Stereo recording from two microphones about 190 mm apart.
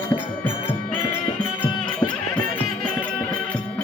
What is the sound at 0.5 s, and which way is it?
Music, 25° left (ahead or behind).